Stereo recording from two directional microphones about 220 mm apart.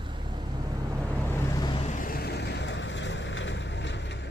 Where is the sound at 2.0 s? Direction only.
45° left (ahead or behind).